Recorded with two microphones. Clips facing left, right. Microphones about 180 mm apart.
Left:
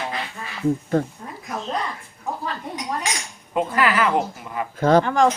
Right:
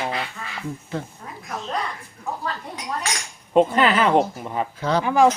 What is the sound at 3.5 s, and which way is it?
A woman's voice, 25° right (ahead or behind).